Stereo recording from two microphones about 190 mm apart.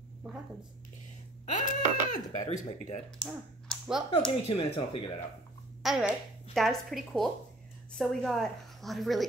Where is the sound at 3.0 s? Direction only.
Centre (ahead or behind).